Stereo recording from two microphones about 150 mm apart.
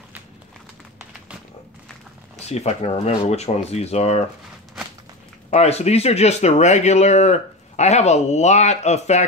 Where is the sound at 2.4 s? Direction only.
45° left (ahead or behind).